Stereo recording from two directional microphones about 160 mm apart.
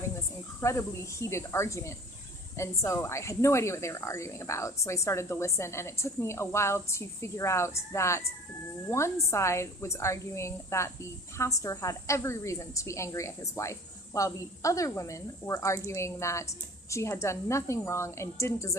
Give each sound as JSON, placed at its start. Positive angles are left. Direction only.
{"t": 0.6, "sound": "a woman's voice", "side_deg": 20}